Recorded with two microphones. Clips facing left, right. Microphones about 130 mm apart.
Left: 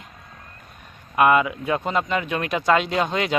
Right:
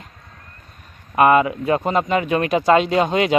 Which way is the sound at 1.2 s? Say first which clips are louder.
Right 3 dB; 45° right (ahead or behind).